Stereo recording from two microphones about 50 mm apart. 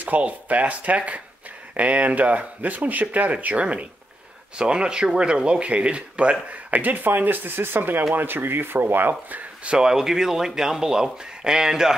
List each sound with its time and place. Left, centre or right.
0.0 s speech: right
6.5 s speech: right
9.7 s speech: centre